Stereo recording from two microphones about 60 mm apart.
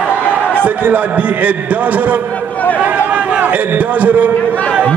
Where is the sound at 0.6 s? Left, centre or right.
Right.